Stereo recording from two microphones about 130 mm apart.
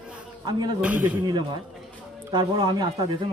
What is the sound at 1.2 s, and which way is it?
Speech, 35° right (ahead or behind).